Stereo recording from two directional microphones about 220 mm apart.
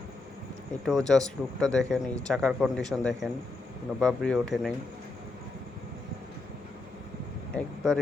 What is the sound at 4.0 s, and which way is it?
Speech, centre (ahead or behind).